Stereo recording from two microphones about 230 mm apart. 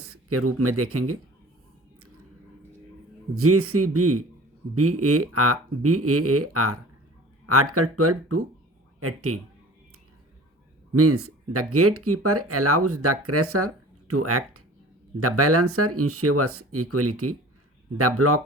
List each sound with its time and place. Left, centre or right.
0.0 s speech: right
3.3 s speech: right
10.9 s speech: right